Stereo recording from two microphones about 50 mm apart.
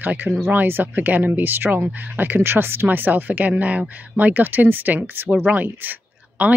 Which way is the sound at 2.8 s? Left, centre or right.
Right.